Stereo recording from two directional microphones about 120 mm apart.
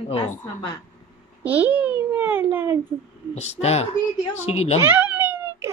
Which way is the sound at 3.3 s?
65° left (ahead or behind).